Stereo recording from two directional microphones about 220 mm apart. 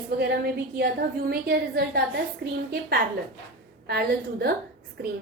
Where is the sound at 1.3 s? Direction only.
45° right (ahead or behind).